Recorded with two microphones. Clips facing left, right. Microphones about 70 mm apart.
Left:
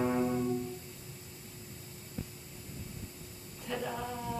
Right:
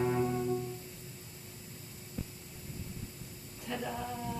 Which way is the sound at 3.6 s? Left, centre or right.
Centre.